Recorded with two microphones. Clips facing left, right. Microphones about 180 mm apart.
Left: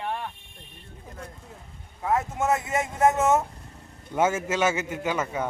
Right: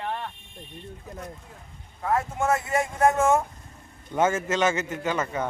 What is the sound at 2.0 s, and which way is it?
Speech, 20° left (ahead or behind).